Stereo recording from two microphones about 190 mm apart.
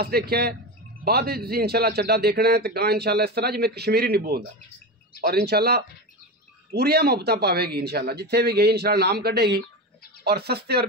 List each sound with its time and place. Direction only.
0.0 s a man's voice: 55° right (ahead or behind)